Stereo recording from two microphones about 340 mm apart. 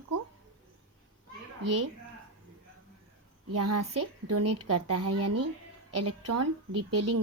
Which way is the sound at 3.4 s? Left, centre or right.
Right.